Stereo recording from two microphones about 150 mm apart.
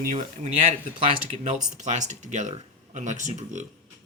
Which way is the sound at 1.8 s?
50° right (ahead or behind).